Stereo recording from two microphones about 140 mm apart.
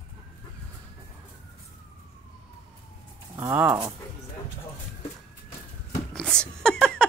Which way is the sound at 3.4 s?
15° right (ahead or behind).